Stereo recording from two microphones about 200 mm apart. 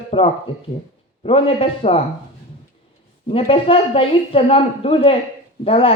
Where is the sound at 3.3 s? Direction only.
30° left (ahead or behind).